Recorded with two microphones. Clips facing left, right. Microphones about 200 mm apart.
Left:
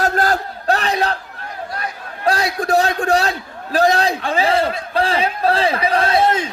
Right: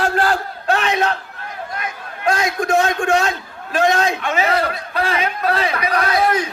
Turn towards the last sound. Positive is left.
turn(degrees=25)  # may be behind; listen again after turning